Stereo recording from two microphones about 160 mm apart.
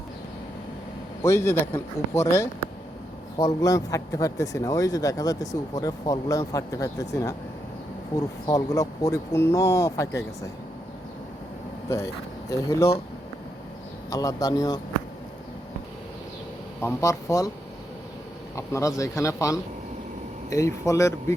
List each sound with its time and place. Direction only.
1.2 s speech: 15° left (ahead or behind)
11.9 s speech: 20° left (ahead or behind)
14.1 s speech: 20° left (ahead or behind)
16.8 s speech: 20° left (ahead or behind)
18.5 s speech: 20° left (ahead or behind)